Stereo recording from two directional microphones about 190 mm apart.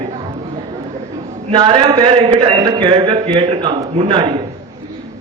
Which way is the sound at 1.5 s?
25° right (ahead or behind).